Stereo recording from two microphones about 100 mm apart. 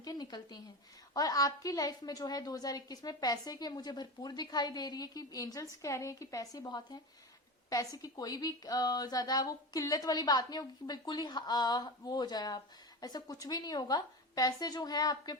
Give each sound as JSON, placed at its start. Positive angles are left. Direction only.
{"t": 0.0, "sound": "a woman's voice", "side_deg": 40}